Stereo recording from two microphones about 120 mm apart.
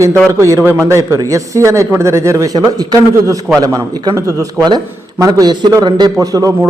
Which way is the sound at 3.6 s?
30° right (ahead or behind).